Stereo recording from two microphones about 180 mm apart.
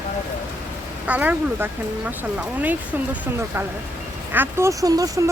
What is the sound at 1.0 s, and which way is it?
Speech, 10° right (ahead or behind).